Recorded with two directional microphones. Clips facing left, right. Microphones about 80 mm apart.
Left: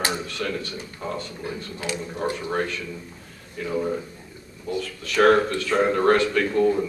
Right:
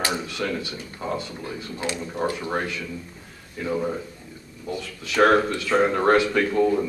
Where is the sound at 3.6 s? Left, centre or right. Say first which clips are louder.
Right 2 dB; centre.